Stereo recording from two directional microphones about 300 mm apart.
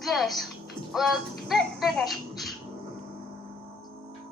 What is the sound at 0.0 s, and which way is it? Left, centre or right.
Music, centre.